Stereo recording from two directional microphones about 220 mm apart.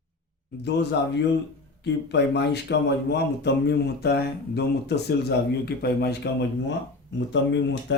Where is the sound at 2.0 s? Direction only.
50° left (ahead or behind).